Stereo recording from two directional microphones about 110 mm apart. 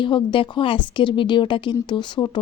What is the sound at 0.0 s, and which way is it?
Speech, 50° left (ahead or behind).